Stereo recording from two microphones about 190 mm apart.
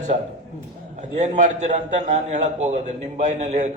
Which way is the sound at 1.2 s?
35° right (ahead or behind).